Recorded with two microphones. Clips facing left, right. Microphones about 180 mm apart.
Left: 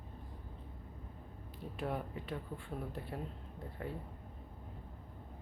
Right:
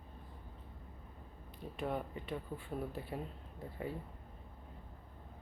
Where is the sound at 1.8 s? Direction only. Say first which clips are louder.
Right 1 dB; centre (ahead or behind).